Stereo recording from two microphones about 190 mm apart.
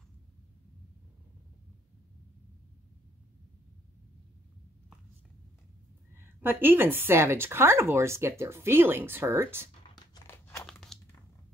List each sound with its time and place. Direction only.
6.1 s speech: 10° right (ahead or behind)
10.1 s crunch: 15° left (ahead or behind)
10.7 s a sound: 5° left (ahead or behind)